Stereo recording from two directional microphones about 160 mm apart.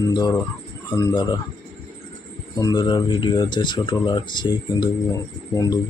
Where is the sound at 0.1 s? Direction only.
25° left (ahead or behind).